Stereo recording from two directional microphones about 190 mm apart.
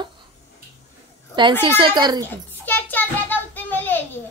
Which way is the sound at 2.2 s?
10° left (ahead or behind).